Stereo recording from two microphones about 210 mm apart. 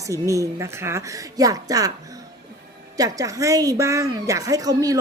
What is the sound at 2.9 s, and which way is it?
A woman's voice, 15° right (ahead or behind).